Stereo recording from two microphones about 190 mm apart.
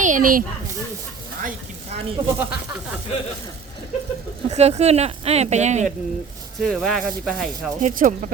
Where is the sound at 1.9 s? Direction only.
35° right (ahead or behind).